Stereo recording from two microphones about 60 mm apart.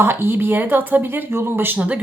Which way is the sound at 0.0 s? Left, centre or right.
Right.